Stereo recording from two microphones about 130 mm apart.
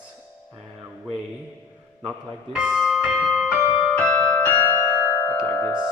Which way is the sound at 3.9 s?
10° left (ahead or behind).